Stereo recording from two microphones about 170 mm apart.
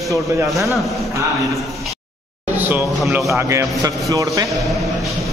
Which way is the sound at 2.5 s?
10° right (ahead or behind).